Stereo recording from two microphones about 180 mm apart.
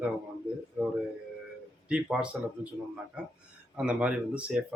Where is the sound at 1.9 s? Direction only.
5° right (ahead or behind).